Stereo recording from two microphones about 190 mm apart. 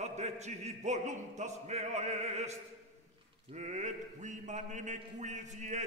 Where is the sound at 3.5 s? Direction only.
35° right (ahead or behind).